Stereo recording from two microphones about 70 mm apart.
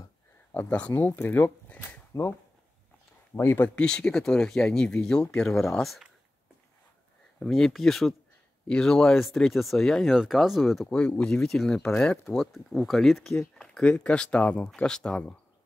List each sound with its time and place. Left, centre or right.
0.7 s speech: centre
0.9 s speech: left
3.3 s speech: left
3.7 s speech: centre
7.3 s speech: centre
10.9 s speech: centre